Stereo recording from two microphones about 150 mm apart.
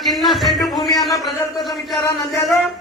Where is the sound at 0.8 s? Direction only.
25° left (ahead or behind).